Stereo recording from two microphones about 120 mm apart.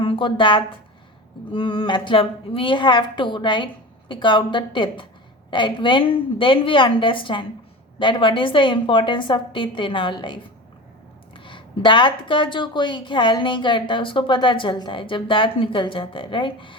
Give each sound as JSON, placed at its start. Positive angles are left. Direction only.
{"t": 0.0, "sound": "speech", "side_deg": 45}